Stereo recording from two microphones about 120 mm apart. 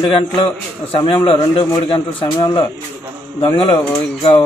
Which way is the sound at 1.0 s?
45° left (ahead or behind).